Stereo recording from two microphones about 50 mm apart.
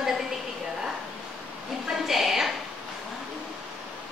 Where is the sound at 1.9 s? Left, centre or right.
Centre.